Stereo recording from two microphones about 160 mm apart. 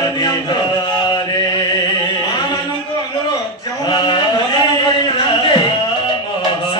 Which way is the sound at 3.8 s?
25° left (ahead or behind).